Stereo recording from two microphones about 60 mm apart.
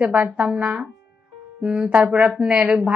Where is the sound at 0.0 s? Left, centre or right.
Right.